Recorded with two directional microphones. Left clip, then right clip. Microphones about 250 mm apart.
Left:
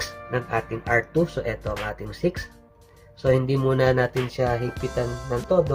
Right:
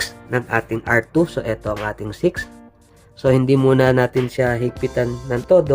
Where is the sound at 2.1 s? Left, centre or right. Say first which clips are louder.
Right 7 dB; right.